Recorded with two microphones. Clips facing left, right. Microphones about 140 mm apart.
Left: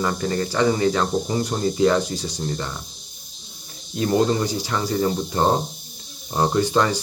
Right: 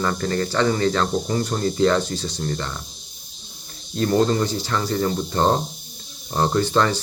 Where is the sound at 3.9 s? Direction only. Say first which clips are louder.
Right 1 dB; 10° left (ahead or behind).